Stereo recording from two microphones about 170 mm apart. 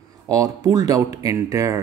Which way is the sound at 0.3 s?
20° right (ahead or behind).